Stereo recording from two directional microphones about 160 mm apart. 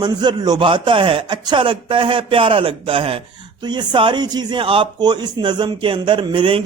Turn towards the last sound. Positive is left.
turn(degrees=-30)  # may be behind; listen again after turning